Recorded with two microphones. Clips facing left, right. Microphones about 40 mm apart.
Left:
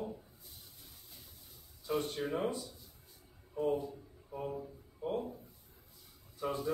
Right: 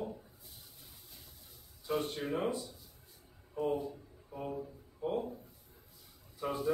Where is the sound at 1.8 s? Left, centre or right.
Centre.